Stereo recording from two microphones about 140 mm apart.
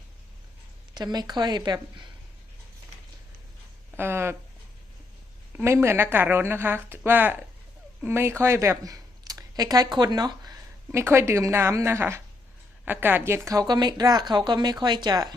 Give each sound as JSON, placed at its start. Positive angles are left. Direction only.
{"t": 0.9, "sound": "speech", "side_deg": -30}
{"t": 3.9, "sound": "a sound", "side_deg": -15}
{"t": 5.5, "sound": "speech", "side_deg": -20}
{"t": 11.0, "sound": "speech", "side_deg": -20}